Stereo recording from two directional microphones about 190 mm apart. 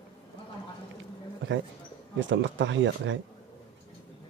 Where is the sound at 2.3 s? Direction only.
70° right (ahead or behind).